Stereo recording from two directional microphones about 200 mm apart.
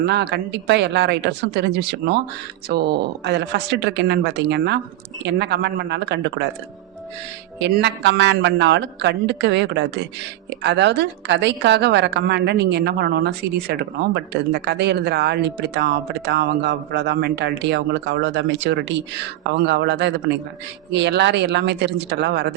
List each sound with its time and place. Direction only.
0.0 s a woman's voice: 55° right (ahead or behind)
7.6 s a woman's voice: 60° right (ahead or behind)